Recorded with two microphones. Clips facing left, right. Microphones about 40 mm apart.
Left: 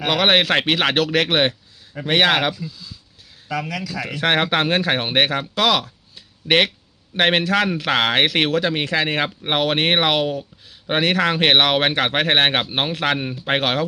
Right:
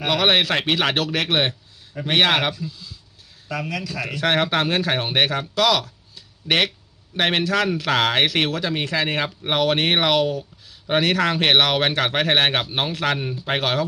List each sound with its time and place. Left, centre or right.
0.1 s speech: left
2.2 s speech: centre
4.0 s speech: left
8.5 s speech: left